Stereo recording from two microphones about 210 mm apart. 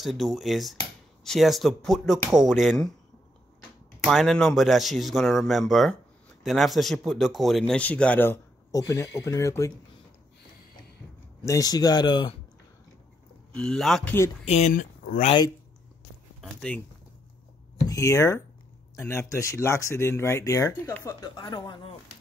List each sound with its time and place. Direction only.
0.0 s a man's voice: centre (ahead or behind)
4.0 s a man's voice: centre (ahead or behind)
11.4 s speech: 15° left (ahead or behind)
13.6 s a man's voice: centre (ahead or behind)
14.4 s speech: 30° left (ahead or behind)
16.3 s speech: 5° left (ahead or behind)
17.8 s speech: 15° left (ahead or behind)